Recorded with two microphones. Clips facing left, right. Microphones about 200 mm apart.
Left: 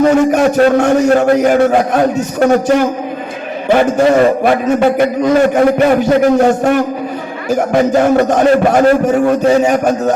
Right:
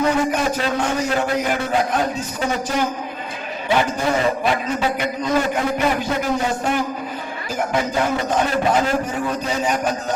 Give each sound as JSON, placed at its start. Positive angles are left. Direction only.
{"t": 0.0, "sound": "a man's voice", "side_deg": 50}
{"t": 4.0, "sound": "a man's voice", "side_deg": 55}